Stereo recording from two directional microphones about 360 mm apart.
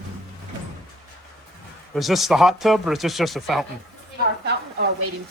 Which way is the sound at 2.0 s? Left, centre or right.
Centre.